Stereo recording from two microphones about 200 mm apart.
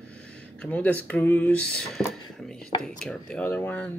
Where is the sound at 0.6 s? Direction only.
5° left (ahead or behind).